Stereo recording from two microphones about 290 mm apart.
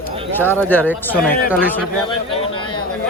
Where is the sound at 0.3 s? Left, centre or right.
Centre.